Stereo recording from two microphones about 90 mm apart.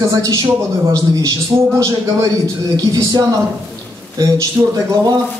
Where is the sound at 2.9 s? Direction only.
45° right (ahead or behind).